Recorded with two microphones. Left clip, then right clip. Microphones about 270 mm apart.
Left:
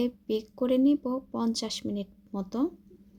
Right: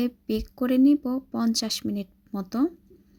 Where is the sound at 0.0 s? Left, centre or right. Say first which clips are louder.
Right 1 dB; right.